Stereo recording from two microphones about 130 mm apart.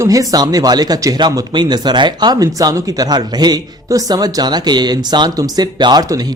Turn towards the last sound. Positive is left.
turn(degrees=-30)  # may be behind; listen again after turning